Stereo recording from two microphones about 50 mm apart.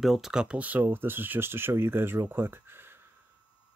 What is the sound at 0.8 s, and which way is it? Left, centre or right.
Speech, right.